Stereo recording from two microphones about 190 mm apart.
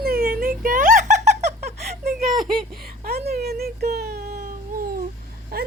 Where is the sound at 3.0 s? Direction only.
55° right (ahead or behind).